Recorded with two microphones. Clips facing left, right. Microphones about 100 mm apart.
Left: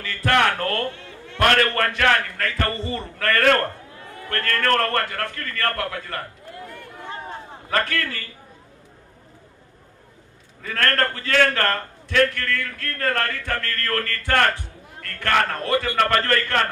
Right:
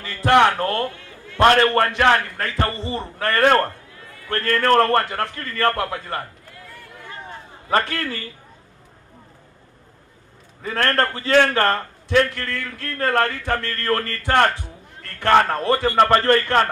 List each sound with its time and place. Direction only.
0.0 s a man's voice: 20° right (ahead or behind)
7.7 s a man's voice: 25° right (ahead or behind)
10.6 s a man's voice: 25° right (ahead or behind)
15.0 s a sound: 25° right (ahead or behind)
15.6 s a man's voice: 30° right (ahead or behind)